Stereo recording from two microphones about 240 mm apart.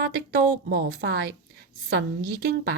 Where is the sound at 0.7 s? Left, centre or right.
Right.